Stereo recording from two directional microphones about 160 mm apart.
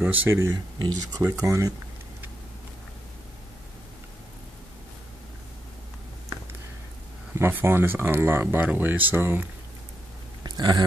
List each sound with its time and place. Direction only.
0.0 s speech: 10° right (ahead or behind)
7.3 s speech: 15° right (ahead or behind)
10.4 s a sound: 25° right (ahead or behind)